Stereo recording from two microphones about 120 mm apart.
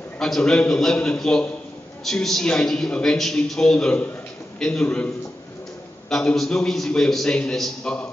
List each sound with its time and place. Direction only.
0.2 s a man's voice: 5° left (ahead or behind)